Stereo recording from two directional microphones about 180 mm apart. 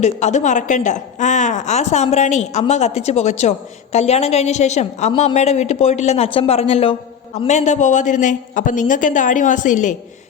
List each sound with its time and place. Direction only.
0.0 s a woman's voice: 40° left (ahead or behind)